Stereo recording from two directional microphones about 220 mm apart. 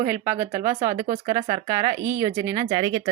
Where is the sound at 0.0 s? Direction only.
10° right (ahead or behind).